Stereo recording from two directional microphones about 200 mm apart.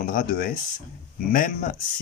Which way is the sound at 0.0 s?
45° left (ahead or behind).